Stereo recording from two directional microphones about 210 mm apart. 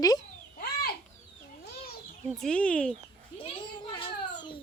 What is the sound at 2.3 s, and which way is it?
Speech, 5° left (ahead or behind).